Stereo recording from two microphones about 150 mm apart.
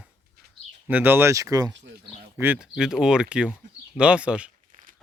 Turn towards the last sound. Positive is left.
turn(degrees=-5)  # may be behind; listen again after turning